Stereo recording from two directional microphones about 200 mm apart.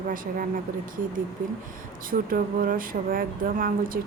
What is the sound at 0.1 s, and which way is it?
Speech, 45° right (ahead or behind).